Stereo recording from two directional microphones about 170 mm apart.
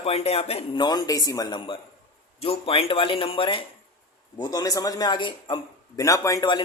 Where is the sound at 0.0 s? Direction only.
35° left (ahead or behind).